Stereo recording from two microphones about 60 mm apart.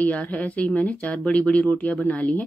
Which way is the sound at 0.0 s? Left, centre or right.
Left.